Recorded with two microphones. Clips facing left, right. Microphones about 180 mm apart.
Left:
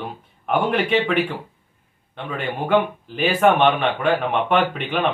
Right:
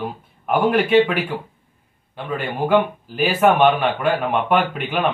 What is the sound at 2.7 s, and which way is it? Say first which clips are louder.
Speech: right 1 dB; 10° right (ahead or behind).